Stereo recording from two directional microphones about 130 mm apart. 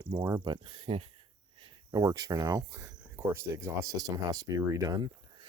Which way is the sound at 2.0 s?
25° right (ahead or behind).